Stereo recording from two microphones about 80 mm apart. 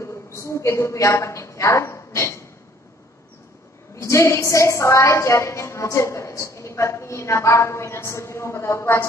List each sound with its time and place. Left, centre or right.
0.0 s a woman's voice: left
3.9 s a woman's voice: left